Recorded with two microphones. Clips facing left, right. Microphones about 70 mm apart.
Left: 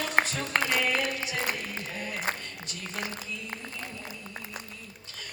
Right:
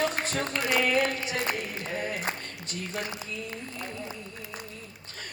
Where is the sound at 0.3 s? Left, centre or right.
Right.